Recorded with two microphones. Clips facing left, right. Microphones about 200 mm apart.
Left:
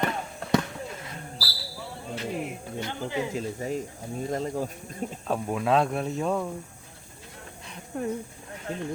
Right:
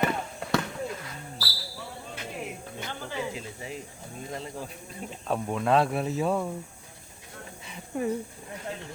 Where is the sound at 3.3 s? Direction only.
45° left (ahead or behind).